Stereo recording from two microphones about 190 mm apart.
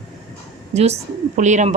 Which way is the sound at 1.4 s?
40° right (ahead or behind).